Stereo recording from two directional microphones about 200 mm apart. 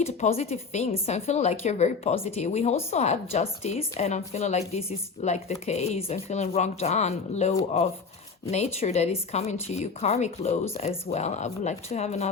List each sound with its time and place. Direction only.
0.0 s speech: 35° left (ahead or behind)